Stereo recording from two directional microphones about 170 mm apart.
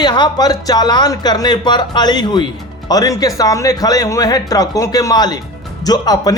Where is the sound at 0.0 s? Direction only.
25° left (ahead or behind).